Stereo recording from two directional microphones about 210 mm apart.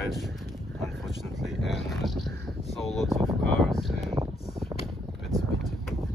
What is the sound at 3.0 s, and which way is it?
Vehicle, 15° right (ahead or behind).